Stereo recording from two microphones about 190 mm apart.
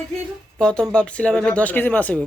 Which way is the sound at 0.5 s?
5° left (ahead or behind).